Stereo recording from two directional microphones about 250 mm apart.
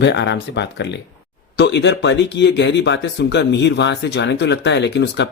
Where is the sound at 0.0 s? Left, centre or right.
Left.